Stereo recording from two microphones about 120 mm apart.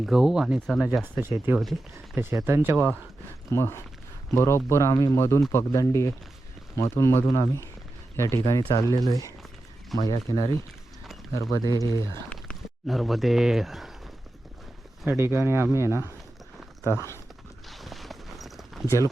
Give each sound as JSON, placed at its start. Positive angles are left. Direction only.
{"t": 0.0, "sound": "speech", "side_deg": -5}
{"t": 3.5, "sound": "speech", "side_deg": 25}
{"t": 12.3, "sound": "speech", "side_deg": 5}
{"t": 15.2, "sound": "speech", "side_deg": -20}
{"t": 16.8, "sound": "speech", "side_deg": 25}
{"t": 17.7, "sound": "a sound", "side_deg": 0}